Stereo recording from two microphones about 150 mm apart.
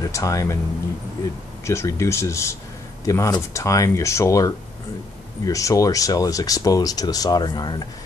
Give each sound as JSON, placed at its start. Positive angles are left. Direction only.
{"t": 0.1, "sound": "speech", "side_deg": 20}
{"t": 1.6, "sound": "speech", "side_deg": 20}